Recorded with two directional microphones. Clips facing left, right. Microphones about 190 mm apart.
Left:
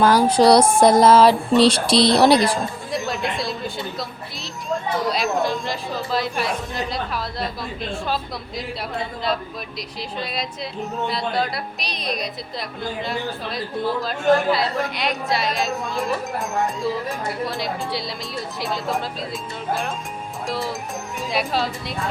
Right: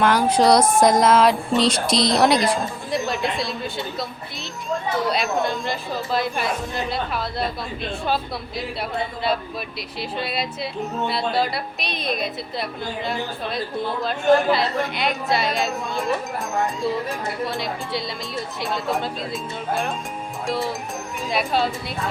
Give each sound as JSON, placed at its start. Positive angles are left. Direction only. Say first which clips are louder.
{"t": 0.0, "sound": "speech", "louder": "left 3 dB", "side_deg": 35}
{"t": 2.9, "sound": "music", "louder": "right 2 dB", "side_deg": 0}
{"t": 5.0, "sound": "a woman's voice", "louder": "left 2 dB", "side_deg": 0}
{"t": 10.0, "sound": "a woman's voice", "louder": "right 2 dB", "side_deg": -5}
{"t": 21.2, "sound": "a woman's voice", "louder": "right 1 dB", "side_deg": 0}